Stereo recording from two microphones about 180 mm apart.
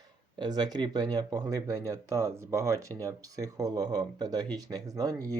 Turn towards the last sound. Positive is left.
turn(degrees=-20)  # may be behind; listen again after turning